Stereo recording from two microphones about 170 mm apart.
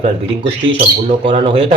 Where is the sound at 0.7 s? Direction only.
30° right (ahead or behind).